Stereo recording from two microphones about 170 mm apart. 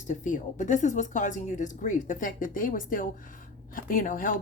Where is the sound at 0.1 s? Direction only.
50° left (ahead or behind).